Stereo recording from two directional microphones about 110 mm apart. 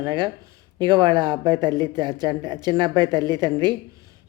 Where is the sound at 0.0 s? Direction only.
40° right (ahead or behind).